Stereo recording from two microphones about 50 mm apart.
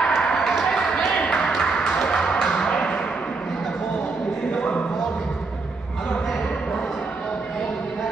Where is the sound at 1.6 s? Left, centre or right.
Centre.